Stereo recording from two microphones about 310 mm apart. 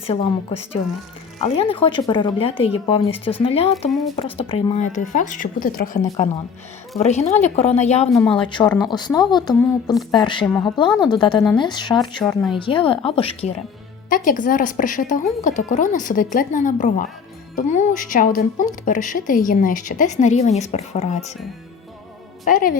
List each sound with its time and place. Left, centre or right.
0.1 s speech: centre
3.8 s a woman's voice: centre
4.1 s speech: centre
12.2 s a woman's voice: centre
12.5 s speech: centre
22.4 s speech: left